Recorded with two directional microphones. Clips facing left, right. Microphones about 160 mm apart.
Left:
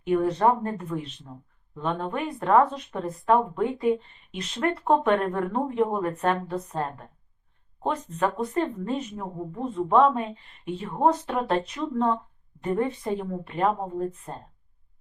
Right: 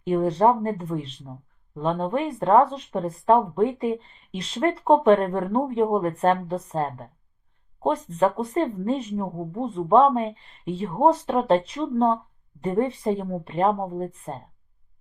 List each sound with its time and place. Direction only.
0.0 s speech: 35° right (ahead or behind)
7.9 s speech: 35° right (ahead or behind)